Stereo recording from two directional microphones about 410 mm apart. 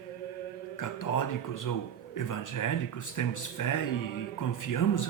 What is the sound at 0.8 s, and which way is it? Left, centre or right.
Speech, left.